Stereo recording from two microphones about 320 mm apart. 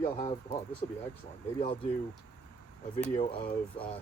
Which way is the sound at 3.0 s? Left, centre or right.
Centre.